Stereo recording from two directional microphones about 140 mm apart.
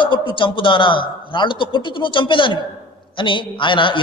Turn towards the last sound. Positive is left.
turn(degrees=35)  # may be behind; listen again after turning